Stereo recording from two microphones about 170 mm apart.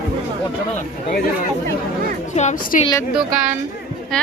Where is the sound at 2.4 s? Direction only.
45° left (ahead or behind).